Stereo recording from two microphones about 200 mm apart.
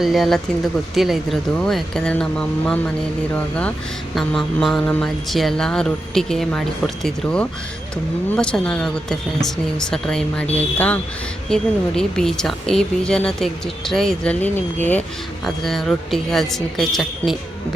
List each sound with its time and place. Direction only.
0.0 s speech: centre (ahead or behind)